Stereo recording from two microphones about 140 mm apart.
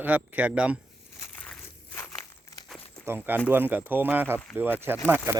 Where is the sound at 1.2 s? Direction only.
10° left (ahead or behind).